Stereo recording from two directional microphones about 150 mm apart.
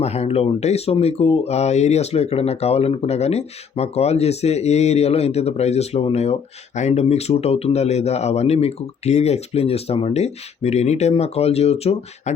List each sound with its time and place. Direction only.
0.0 s speech: 45° left (ahead or behind)